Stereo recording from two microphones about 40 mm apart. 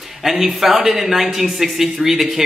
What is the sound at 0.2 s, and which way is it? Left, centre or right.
Speech, centre.